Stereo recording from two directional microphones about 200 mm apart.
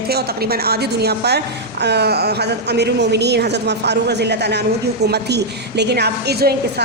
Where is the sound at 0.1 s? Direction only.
50° right (ahead or behind).